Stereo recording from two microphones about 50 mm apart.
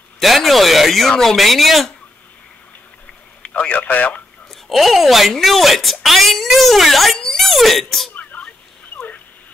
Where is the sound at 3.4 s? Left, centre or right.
Left.